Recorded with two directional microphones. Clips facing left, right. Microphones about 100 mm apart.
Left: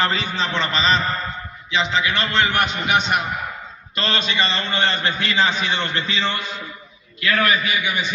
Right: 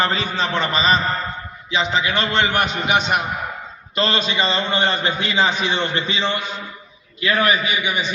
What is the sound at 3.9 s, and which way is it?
Speech, 30° right (ahead or behind).